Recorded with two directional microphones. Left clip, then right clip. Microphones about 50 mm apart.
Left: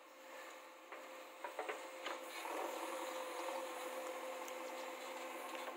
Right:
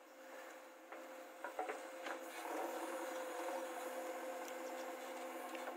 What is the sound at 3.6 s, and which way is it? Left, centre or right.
Printer, right.